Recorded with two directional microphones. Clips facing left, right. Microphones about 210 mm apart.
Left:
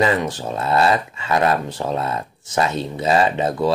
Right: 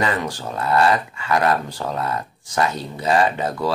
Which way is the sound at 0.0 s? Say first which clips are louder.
Left 4 dB; 20° left (ahead or behind).